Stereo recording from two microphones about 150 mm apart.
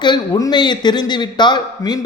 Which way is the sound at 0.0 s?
25° left (ahead or behind).